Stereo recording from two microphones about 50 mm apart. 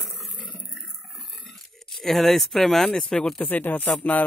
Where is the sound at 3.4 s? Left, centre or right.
Left.